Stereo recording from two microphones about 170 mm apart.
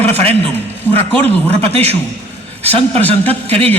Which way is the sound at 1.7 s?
35° right (ahead or behind).